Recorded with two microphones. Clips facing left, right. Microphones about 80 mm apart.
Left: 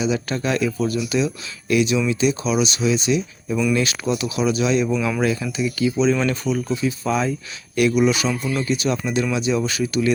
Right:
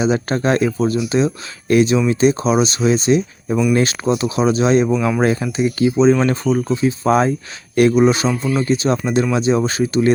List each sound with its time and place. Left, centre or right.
0.0 s speech: right